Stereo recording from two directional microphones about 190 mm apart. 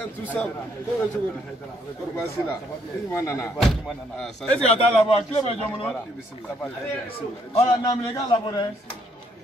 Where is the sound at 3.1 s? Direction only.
15° left (ahead or behind).